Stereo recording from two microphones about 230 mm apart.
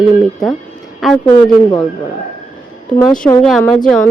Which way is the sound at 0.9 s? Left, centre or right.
Centre.